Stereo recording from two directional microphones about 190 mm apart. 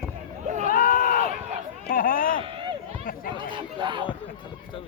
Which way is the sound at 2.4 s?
25° right (ahead or behind).